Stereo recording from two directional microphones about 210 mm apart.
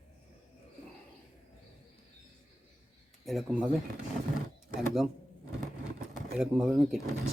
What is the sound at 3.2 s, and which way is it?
Speech, centre (ahead or behind).